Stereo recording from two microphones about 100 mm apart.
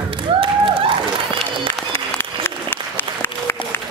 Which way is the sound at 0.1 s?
60° right (ahead or behind).